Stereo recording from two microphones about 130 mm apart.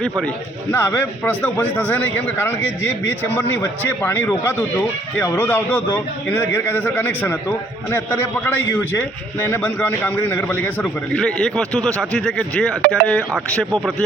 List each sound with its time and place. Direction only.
0.7 s a man's voice: 15° left (ahead or behind)